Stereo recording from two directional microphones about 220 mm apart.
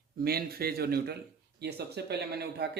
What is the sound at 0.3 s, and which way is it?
Speech, 45° right (ahead or behind).